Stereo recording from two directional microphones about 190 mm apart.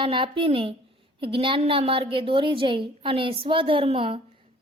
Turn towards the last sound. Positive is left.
turn(degrees=-30)  # may be behind; listen again after turning